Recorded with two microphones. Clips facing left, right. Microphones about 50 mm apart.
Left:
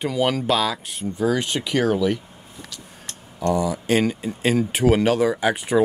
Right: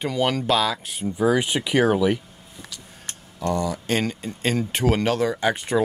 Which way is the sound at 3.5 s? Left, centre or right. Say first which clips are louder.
Left 3 dB; centre.